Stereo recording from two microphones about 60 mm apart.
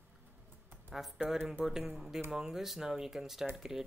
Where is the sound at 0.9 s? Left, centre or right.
Centre.